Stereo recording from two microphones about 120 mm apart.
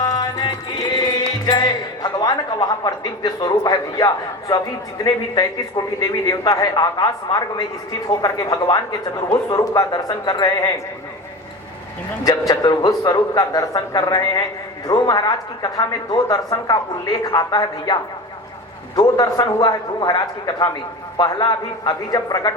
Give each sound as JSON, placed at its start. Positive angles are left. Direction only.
{"t": 0.0, "sound": "music", "side_deg": 30}
{"t": 1.5, "sound": "speech", "side_deg": 35}
{"t": 12.2, "sound": "speech", "side_deg": 30}